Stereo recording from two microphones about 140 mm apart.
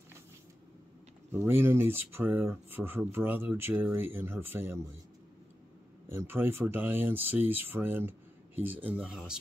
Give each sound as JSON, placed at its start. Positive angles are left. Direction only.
{"t": 1.3, "sound": "speech", "side_deg": -15}
{"t": 6.0, "sound": "speech", "side_deg": -15}